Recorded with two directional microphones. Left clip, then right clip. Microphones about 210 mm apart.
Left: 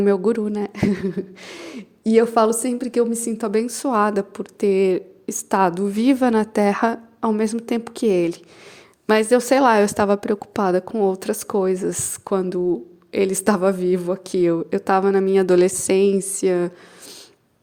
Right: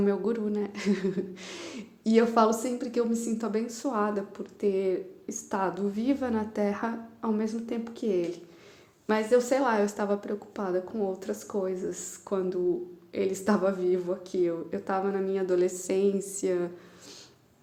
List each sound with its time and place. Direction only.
0.0 s speech: 40° left (ahead or behind)